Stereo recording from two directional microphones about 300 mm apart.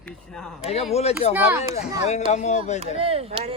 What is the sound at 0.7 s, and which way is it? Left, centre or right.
Speech, left.